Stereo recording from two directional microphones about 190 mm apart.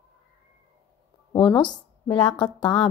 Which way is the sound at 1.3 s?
20° left (ahead or behind).